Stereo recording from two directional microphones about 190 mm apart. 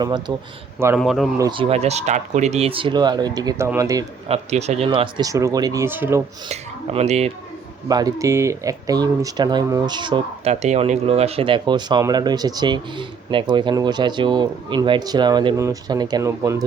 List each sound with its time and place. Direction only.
0.0 s speech: 25° right (ahead or behind)
0.9 s speech: centre (ahead or behind)
1.4 s a man's voice: 25° right (ahead or behind)
4.3 s speech: 35° right (ahead or behind); by 6.2 s 10° right (ahead or behind)
6.5 s speech: 35° right (ahead or behind)
7.9 s speech: 20° right (ahead or behind)